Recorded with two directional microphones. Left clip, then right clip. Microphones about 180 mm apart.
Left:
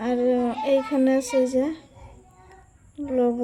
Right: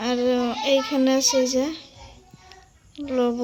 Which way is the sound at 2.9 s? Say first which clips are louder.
Even; 10° left (ahead or behind).